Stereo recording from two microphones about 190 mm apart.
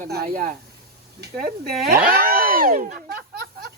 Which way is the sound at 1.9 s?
50° right (ahead or behind).